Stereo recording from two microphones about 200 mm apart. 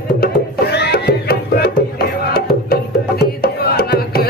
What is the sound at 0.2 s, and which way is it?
Music, 55° left (ahead or behind).